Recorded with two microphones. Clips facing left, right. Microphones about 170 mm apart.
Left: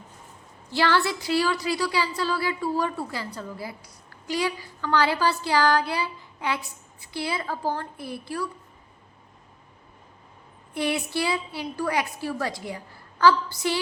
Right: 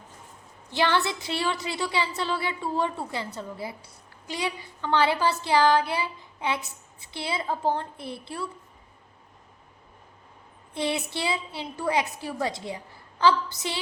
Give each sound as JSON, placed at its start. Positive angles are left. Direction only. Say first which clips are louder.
{"t": 0.7, "sound": "a woman's voice", "louder": "left 2 dB", "side_deg": -20}
{"t": 10.8, "sound": "a woman's voice", "louder": "left 2 dB", "side_deg": -20}